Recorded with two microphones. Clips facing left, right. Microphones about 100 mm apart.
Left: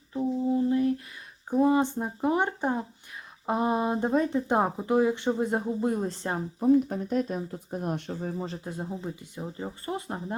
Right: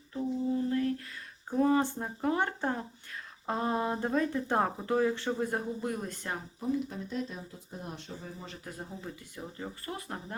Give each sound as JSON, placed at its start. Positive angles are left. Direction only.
{"t": 0.1, "sound": "lullaby", "side_deg": 20}
{"t": 1.5, "sound": "speech", "side_deg": 15}
{"t": 6.6, "sound": "speech", "side_deg": 50}
{"t": 8.4, "sound": "speech", "side_deg": 30}